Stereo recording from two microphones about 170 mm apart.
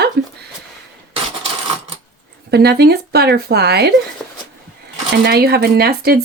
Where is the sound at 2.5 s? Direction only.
70° right (ahead or behind).